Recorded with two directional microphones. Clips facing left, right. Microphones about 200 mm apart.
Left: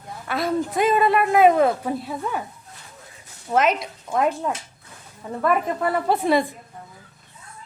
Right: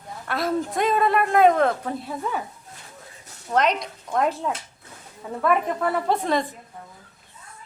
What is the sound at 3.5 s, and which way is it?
A woman's voice, 5° left (ahead or behind).